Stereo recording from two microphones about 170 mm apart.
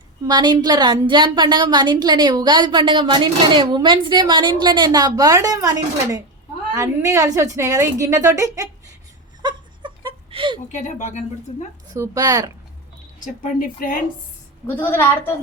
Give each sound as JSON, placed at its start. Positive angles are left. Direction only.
{"t": 0.3, "sound": "a woman's voice", "side_deg": -25}
{"t": 9.4, "sound": "a sound", "side_deg": -25}
{"t": 10.7, "sound": "speech", "side_deg": 45}
{"t": 11.9, "sound": "a woman's voice", "side_deg": -20}
{"t": 13.2, "sound": "speech", "side_deg": 50}
{"t": 14.7, "sound": "a woman's voice", "side_deg": 10}